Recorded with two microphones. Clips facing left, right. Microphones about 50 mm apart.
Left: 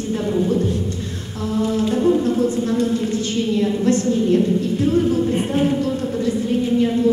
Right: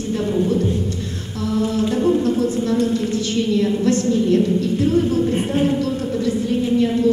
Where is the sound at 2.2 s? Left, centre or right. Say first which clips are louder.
Even; left.